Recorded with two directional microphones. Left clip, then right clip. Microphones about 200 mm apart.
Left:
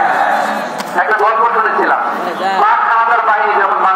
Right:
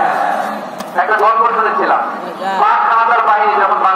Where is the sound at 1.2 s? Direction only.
20° right (ahead or behind).